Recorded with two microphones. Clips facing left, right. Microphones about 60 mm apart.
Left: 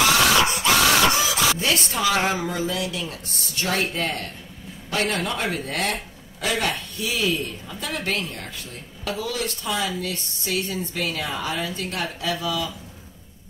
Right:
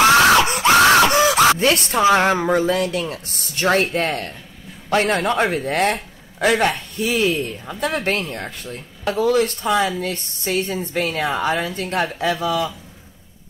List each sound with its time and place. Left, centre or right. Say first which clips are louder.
0.7 s a man's voice: right 8 dB; right